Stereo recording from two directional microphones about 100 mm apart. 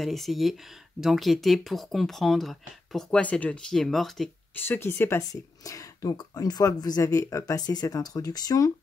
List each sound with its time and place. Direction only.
0.0 s speech: centre (ahead or behind)
4.6 s speech: 25° left (ahead or behind)
5.3 s speech: 35° left (ahead or behind)